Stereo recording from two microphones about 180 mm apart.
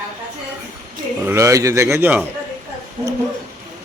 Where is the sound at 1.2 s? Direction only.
15° right (ahead or behind).